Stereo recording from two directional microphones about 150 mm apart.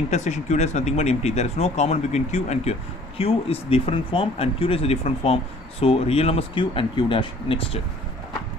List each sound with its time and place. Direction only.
0.1 s speech: 50° left (ahead or behind)